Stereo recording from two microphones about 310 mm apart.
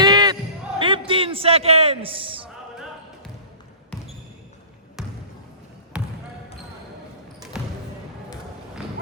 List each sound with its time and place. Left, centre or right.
0.0 s basketball bounce: centre
0.8 s a sound: centre
5.9 s basketball bounce: centre
7.6 s basketball bounce: centre